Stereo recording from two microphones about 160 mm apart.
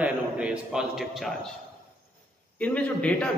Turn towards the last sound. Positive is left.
turn(degrees=10)  # may be behind; listen again after turning